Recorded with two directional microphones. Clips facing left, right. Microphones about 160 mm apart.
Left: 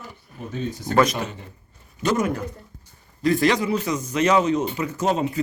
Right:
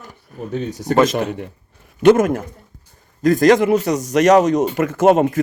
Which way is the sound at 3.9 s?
75° right (ahead or behind).